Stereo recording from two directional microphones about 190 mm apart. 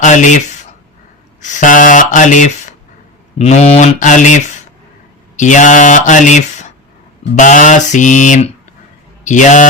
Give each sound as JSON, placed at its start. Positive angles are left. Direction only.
{"t": 0.0, "sound": "speech", "side_deg": 40}